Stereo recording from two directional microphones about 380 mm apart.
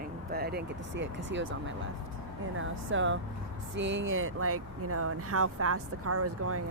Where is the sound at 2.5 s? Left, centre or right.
Right.